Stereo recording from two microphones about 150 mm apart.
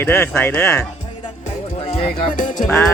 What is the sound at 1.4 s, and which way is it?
Music, 50° left (ahead or behind).